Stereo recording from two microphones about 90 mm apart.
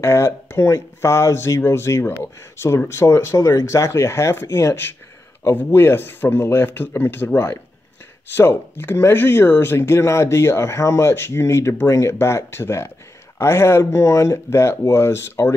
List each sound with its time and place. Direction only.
0.0 s speech: 30° left (ahead or behind)